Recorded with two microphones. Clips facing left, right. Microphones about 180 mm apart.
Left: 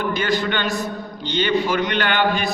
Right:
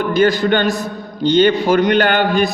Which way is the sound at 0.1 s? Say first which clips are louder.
Right 8 dB; 40° right (ahead or behind).